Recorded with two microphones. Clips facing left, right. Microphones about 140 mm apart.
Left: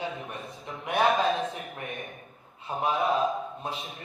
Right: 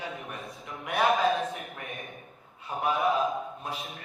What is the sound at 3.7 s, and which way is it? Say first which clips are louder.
Speech: even; centre (ahead or behind).